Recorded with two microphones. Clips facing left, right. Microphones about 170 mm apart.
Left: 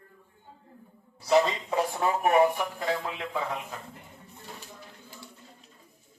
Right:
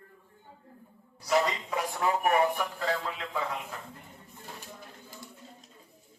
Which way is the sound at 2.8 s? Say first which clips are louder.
Left 1 dB; 15° left (ahead or behind).